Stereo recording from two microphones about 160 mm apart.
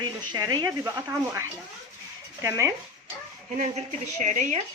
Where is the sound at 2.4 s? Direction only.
20° right (ahead or behind).